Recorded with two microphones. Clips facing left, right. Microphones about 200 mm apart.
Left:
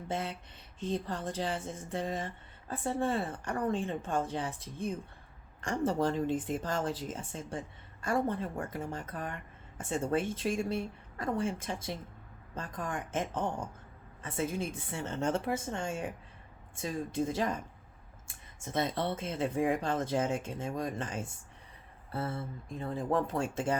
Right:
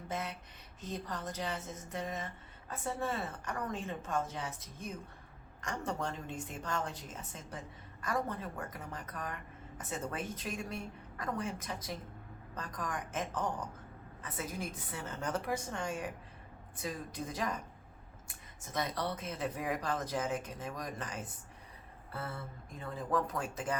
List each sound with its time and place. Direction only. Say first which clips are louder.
0.1 s a woman's voice: left 4 dB; 30° left (ahead or behind)
18.6 s speech: left 4 dB; 25° left (ahead or behind)